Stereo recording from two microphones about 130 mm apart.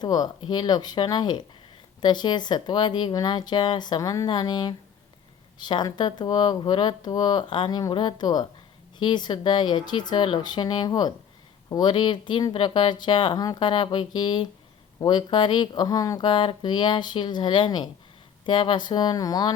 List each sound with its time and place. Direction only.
0.0 s speech: 30° left (ahead or behind)